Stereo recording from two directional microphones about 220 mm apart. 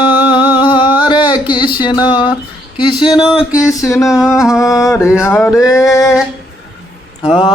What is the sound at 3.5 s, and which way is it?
Music, 15° left (ahead or behind).